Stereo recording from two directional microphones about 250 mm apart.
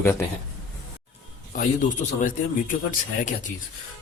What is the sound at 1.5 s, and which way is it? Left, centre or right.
Speech, left.